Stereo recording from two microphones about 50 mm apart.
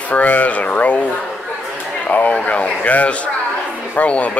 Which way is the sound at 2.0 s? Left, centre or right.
Left.